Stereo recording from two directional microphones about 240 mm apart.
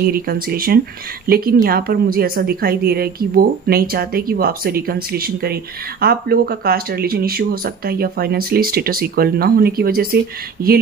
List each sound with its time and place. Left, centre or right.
0.0 s a woman's voice: right